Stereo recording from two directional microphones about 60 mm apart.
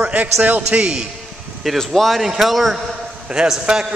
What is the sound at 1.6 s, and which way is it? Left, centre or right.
A man's voice, centre.